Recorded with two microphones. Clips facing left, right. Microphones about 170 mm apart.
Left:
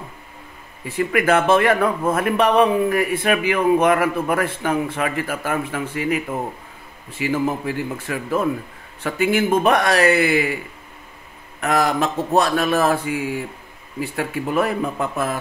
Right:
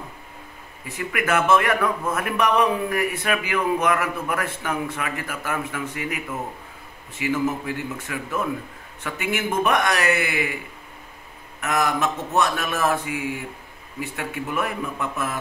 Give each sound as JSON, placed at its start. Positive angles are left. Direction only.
{"t": 0.8, "sound": "a man's voice", "side_deg": 30}
{"t": 7.2, "sound": "a man's voice", "side_deg": 30}
{"t": 11.6, "sound": "a man's voice", "side_deg": 35}